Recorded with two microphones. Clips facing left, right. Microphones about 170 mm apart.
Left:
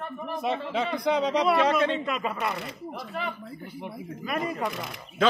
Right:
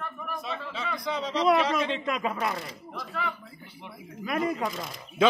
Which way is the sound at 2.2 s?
Centre (ahead or behind).